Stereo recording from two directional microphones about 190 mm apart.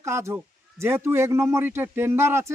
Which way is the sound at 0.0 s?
15° right (ahead or behind).